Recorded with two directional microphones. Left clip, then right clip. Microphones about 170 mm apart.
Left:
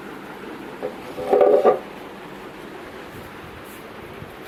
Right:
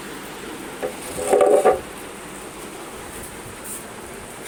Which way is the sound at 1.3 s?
40° left (ahead or behind).